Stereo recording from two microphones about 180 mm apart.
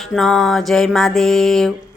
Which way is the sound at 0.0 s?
Centre (ahead or behind).